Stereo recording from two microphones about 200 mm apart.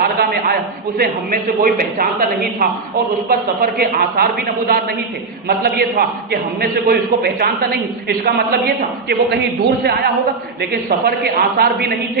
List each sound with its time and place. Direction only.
0.0 s a sound: 50° right (ahead or behind)
0.9 s a man's voice: 50° right (ahead or behind)
3.2 s a man's voice: 50° right (ahead or behind)